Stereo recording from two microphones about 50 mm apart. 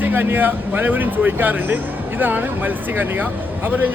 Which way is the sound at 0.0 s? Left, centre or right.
Right.